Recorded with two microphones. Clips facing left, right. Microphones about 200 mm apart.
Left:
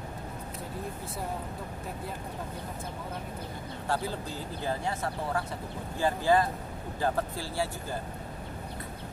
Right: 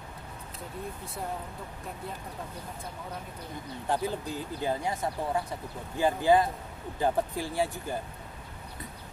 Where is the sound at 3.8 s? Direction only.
15° right (ahead or behind).